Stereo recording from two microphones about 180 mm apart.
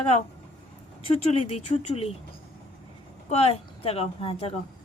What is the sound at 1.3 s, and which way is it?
Speech, 35° left (ahead or behind).